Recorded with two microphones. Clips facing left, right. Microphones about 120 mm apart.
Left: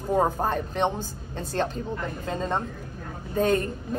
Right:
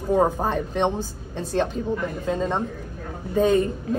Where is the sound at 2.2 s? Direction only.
5° right (ahead or behind).